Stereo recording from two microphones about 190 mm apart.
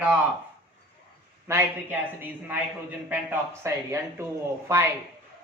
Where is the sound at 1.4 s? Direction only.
15° right (ahead or behind).